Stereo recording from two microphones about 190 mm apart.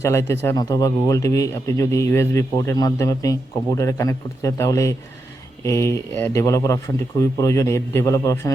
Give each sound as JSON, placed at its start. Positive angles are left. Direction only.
{"t": 0.0, "sound": "a man's voice", "side_deg": 15}